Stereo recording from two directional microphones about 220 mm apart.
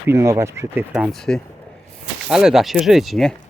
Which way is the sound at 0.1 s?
15° right (ahead or behind).